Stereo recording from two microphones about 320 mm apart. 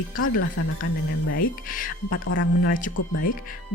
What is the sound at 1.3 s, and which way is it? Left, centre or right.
Speech, left.